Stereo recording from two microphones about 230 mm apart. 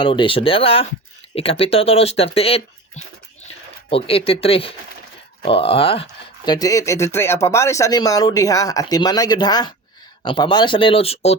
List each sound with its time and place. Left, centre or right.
0.0 s speech: left